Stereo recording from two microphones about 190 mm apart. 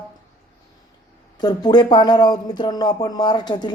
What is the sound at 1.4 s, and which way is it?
Speech, 20° left (ahead or behind).